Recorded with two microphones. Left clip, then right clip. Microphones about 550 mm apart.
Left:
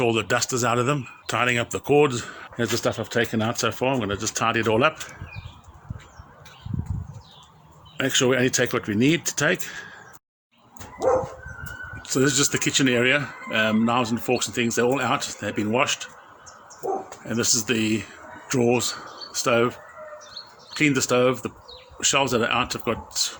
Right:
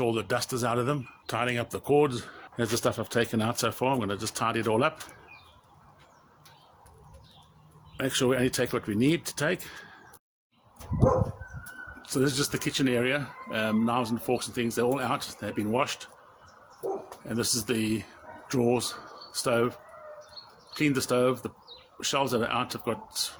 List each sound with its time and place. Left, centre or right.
0.0 s speech: right
7.9 s speech: right
12.0 s speech: right
17.2 s speech: right